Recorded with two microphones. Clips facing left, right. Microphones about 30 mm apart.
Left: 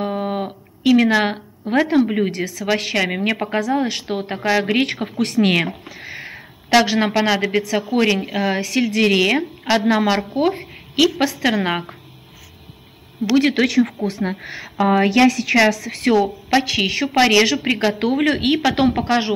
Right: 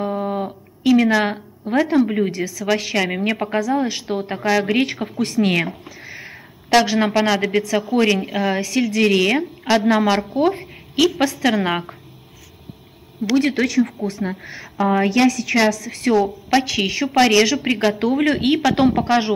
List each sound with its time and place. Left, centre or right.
0.0 s a sound: left
1.7 s a woman's voice: left
2.0 s a woman's voice: centre
4.6 s a woman's voice: left
5.1 s speech: left
5.9 s a sound: left
6.9 s a woman's voice: centre
13.4 s speech: left
14.1 s a woman's voice: left
16.6 s a woman's voice: left